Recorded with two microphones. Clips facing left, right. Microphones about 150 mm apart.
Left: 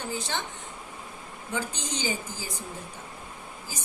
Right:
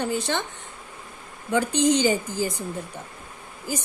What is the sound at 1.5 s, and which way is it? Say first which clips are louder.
Speech: right 13 dB; 65° right (ahead or behind).